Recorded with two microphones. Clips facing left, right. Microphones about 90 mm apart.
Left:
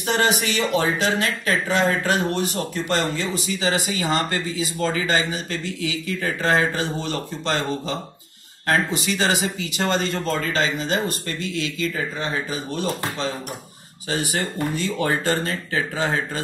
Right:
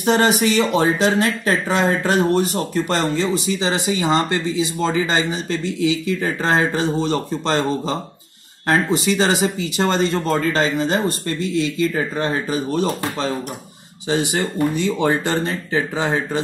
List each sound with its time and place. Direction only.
0.0 s speech: 35° right (ahead or behind)
14.0 s speech: 20° right (ahead or behind)